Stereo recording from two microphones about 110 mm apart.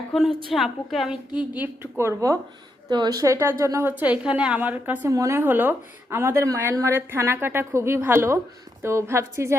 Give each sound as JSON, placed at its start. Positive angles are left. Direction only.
{"t": 0.1, "sound": "a woman's voice", "side_deg": 0}
{"t": 1.4, "sound": "a woman's voice", "side_deg": -15}
{"t": 5.0, "sound": "speech", "side_deg": -25}